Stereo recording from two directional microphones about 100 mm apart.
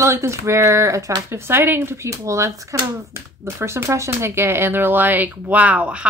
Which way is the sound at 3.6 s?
25° right (ahead or behind).